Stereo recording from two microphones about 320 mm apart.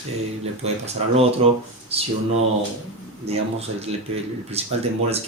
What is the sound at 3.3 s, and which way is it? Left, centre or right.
Speech, centre.